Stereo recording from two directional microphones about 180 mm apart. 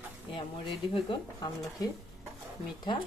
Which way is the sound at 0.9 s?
25° left (ahead or behind).